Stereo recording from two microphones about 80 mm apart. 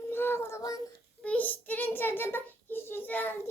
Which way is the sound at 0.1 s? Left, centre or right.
Left.